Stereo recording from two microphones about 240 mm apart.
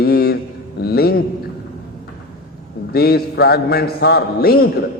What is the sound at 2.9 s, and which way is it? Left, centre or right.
A man's voice, left.